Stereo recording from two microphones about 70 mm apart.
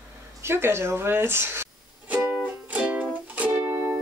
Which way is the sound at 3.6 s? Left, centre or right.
Right.